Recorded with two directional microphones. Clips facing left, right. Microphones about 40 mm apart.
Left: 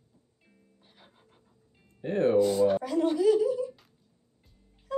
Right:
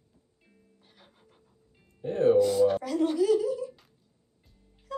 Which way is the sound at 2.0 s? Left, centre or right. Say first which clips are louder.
Right 2 dB; left.